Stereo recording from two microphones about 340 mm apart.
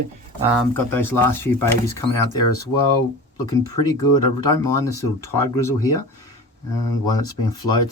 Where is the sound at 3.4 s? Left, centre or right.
Centre.